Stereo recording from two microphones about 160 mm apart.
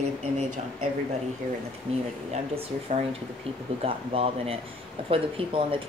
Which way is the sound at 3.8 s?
35° right (ahead or behind).